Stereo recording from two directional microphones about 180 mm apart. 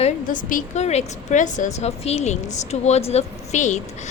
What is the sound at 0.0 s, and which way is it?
A woman's voice, 50° left (ahead or behind).